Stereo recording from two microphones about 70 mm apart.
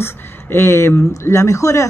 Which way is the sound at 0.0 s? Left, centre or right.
Left.